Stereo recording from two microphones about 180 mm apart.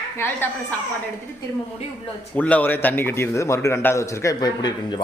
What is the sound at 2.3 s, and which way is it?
A man's voice, 10° left (ahead or behind).